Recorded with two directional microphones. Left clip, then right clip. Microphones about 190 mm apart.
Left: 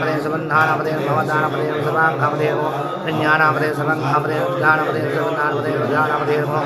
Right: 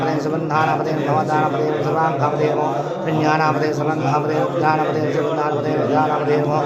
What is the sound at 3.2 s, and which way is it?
Speech, 15° right (ahead or behind).